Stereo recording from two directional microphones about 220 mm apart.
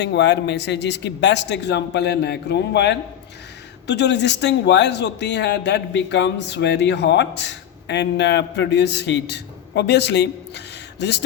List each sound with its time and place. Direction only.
0.0 s a man's voice: 50° left (ahead or behind)